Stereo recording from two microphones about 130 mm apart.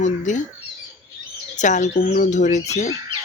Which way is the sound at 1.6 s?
70° left (ahead or behind).